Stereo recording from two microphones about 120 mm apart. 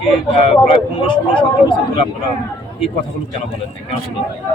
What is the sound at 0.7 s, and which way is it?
Speech, 45° left (ahead or behind).